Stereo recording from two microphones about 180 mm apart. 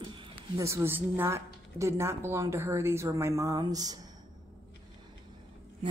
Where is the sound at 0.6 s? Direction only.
15° right (ahead or behind).